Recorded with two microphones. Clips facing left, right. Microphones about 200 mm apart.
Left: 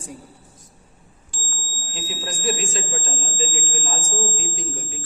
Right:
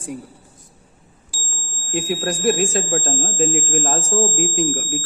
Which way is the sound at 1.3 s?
10° right (ahead or behind).